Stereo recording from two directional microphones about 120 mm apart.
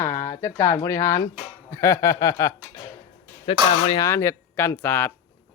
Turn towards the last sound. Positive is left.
turn(degrees=20)  # may be behind; listen again after turning